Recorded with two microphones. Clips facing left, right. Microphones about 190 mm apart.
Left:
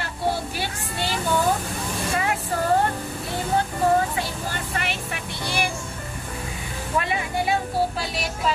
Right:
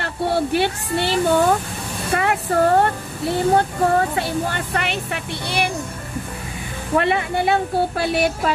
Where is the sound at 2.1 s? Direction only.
60° right (ahead or behind).